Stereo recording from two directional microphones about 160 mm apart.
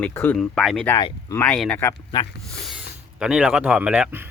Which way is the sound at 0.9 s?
25° left (ahead or behind).